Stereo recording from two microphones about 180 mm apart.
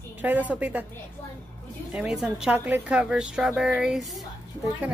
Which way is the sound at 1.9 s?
5° right (ahead or behind).